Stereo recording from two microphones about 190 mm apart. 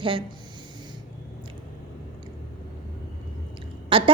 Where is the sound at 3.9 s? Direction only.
30° right (ahead or behind).